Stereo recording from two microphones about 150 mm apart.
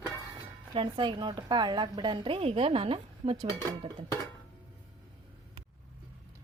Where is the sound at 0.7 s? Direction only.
35° right (ahead or behind).